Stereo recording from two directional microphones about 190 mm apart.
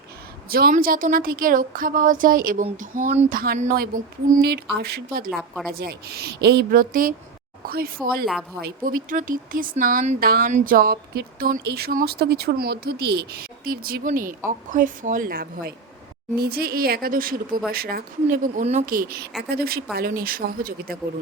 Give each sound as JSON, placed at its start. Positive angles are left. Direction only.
{"t": 0.5, "sound": "speech", "side_deg": -50}
{"t": 4.4, "sound": "speech", "side_deg": -60}
{"t": 5.3, "sound": "a woman's voice", "side_deg": 0}
{"t": 5.7, "sound": "speech", "side_deg": -55}
{"t": 8.0, "sound": "a woman's voice", "side_deg": 5}
{"t": 8.6, "sound": "speech", "side_deg": -50}